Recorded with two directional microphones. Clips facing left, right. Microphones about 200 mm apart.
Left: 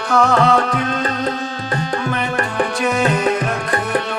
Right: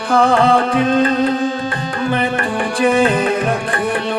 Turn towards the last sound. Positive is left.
turn(degrees=-30)  # may be behind; listen again after turning